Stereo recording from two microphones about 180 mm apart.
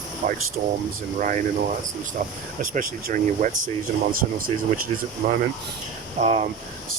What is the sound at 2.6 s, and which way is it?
Speech, 50° right (ahead or behind).